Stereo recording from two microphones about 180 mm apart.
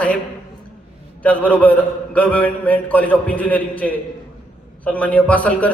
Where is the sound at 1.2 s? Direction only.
10° left (ahead or behind).